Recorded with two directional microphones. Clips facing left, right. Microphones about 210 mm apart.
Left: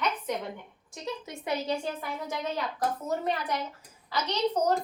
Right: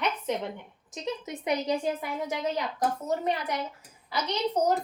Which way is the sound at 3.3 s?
10° right (ahead or behind).